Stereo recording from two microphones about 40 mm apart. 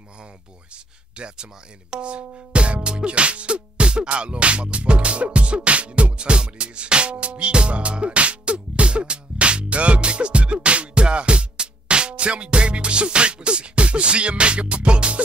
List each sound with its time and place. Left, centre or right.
1.1 s speech: right